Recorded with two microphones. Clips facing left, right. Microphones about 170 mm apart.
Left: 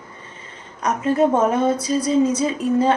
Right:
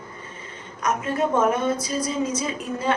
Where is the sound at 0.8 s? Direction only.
35° left (ahead or behind).